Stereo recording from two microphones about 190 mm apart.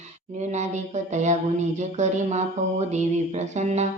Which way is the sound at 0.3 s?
35° right (ahead or behind).